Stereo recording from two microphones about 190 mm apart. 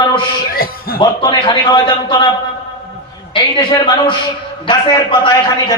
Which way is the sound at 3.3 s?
25° left (ahead or behind).